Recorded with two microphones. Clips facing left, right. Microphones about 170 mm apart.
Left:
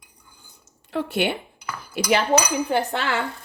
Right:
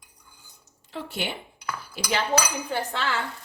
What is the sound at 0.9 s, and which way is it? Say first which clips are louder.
Speech: left 9 dB; 65° left (ahead or behind).